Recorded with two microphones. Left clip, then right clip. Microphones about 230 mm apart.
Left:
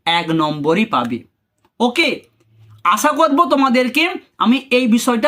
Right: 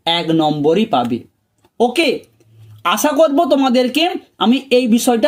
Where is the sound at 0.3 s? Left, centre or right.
Left.